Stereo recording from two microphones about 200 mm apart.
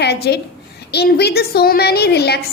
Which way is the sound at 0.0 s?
55° left (ahead or behind).